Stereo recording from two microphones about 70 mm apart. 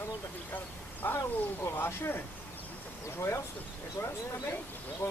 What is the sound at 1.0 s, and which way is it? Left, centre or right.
Speech, left.